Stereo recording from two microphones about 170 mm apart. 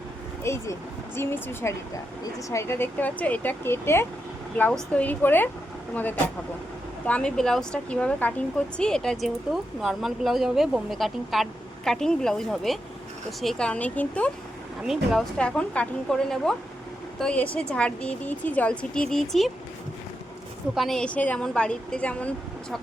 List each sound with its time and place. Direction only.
0.4 s a woman's voice: 15° left (ahead or behind)
20.7 s a woman's voice: centre (ahead or behind)